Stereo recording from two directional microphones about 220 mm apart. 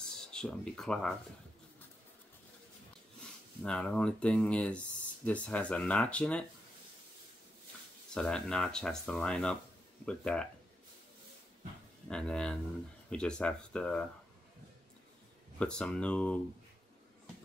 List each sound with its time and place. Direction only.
0.2 s speech: 5° left (ahead or behind)
3.6 s speech: 5° left (ahead or behind)
8.1 s speech: 5° left (ahead or behind)
12.1 s speech: 5° left (ahead or behind)
15.6 s speech: 5° left (ahead or behind)